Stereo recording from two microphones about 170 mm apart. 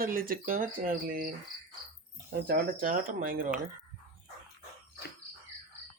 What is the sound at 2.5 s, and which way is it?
Speech, 55° right (ahead or behind).